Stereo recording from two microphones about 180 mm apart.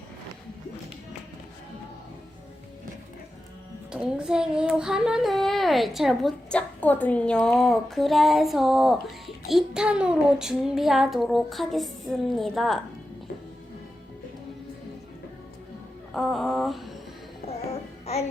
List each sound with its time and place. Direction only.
3.9 s child singing: 5° right (ahead or behind)
16.1 s a sound: centre (ahead or behind)
18.0 s music: 35° left (ahead or behind)